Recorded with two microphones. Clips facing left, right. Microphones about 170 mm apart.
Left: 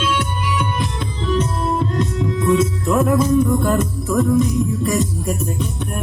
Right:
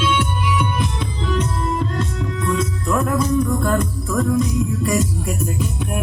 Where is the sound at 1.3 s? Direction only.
10° left (ahead or behind).